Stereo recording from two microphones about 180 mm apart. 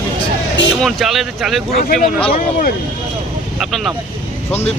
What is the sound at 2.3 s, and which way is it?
Speech, 55° left (ahead or behind).